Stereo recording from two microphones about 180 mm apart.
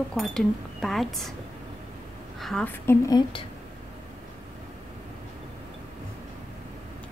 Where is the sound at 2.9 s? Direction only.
20° left (ahead or behind).